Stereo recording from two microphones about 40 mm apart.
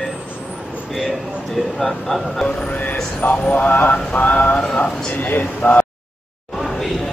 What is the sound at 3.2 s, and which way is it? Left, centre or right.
Speech, left.